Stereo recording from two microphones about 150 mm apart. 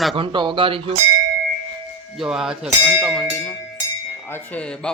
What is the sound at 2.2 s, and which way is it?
Speech, 5° right (ahead or behind).